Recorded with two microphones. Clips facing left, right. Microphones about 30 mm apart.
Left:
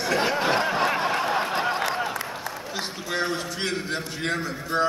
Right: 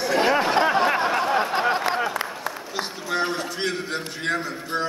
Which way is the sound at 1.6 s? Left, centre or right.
Centre.